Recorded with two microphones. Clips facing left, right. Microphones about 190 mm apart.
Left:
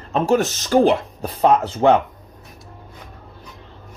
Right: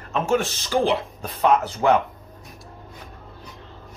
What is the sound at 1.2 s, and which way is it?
Speech, 35° left (ahead or behind).